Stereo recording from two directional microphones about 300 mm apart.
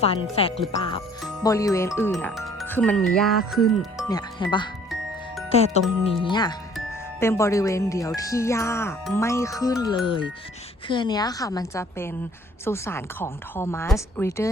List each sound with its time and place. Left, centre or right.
0.0 s speech: centre
4.1 s speech: centre